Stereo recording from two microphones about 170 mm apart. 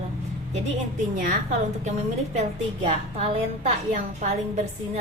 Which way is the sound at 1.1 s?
50° right (ahead or behind).